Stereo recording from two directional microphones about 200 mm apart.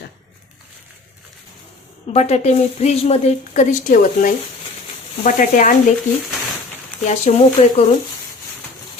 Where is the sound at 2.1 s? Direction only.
30° left (ahead or behind).